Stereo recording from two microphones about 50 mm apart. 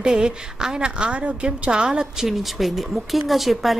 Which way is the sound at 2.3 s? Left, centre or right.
Centre.